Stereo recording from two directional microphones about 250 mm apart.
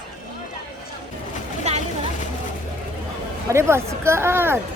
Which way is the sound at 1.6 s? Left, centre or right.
Right.